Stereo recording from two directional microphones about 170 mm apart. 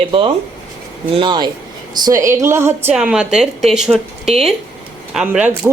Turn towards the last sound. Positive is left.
turn(degrees=-10)  # may be behind; listen again after turning